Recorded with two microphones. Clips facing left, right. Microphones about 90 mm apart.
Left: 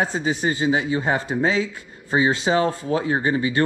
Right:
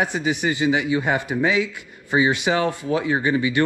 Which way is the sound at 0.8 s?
25° left (ahead or behind).